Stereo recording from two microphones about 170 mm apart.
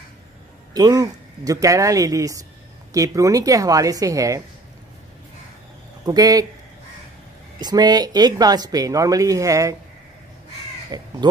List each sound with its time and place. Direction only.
0.7 s speech: 20° right (ahead or behind)
6.0 s speech: 20° right (ahead or behind)
7.6 s speech: 25° right (ahead or behind)
10.9 s speech: 25° right (ahead or behind)